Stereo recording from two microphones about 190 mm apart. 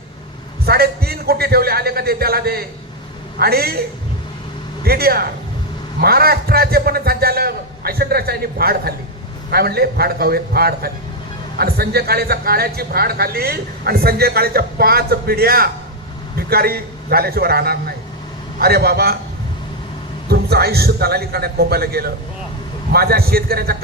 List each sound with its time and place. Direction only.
0.6 s a sound: 55° right (ahead or behind)
3.3 s a man's voice: 55° right (ahead or behind)
4.9 s a man's voice: 55° right (ahead or behind)
20.3 s a man's voice: 55° right (ahead or behind)